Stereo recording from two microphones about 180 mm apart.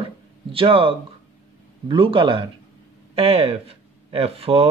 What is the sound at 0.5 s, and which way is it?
Speech, 30° right (ahead or behind).